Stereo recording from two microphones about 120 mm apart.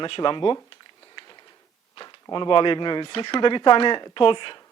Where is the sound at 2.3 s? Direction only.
40° left (ahead or behind).